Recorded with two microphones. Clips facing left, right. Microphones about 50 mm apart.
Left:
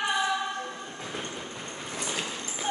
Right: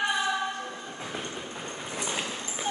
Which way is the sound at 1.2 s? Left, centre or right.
Centre.